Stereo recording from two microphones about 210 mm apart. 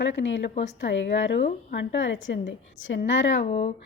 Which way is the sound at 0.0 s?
60° left (ahead or behind).